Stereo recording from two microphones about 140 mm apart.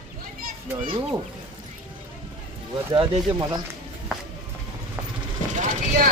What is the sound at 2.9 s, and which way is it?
Speech, 35° right (ahead or behind).